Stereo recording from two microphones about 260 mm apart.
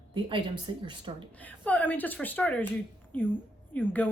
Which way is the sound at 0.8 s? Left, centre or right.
Centre.